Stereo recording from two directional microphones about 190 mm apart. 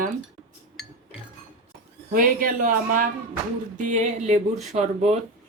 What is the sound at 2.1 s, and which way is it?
Speech, 45° right (ahead or behind).